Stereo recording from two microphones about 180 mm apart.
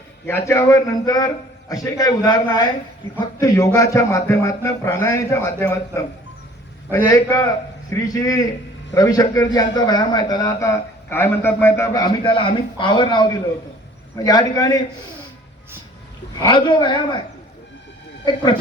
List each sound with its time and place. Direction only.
0.3 s a man's voice: 15° left (ahead or behind)
16.4 s a man's voice: 25° left (ahead or behind)